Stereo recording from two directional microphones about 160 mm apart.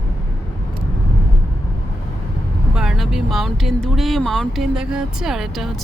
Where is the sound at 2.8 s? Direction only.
Centre (ahead or behind).